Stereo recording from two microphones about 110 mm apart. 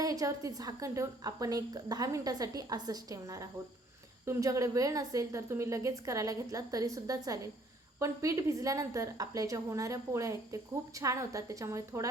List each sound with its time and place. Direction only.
0.0 s a woman's voice: 30° right (ahead or behind)